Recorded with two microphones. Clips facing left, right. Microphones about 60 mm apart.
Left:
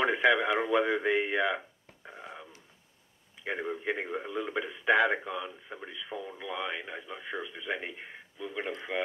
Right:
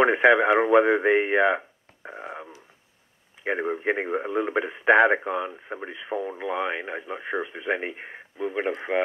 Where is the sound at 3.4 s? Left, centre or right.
Right.